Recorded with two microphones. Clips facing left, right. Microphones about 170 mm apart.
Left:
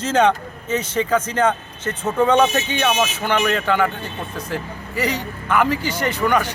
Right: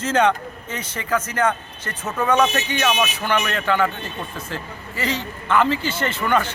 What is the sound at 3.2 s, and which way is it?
A man's voice, 15° left (ahead or behind).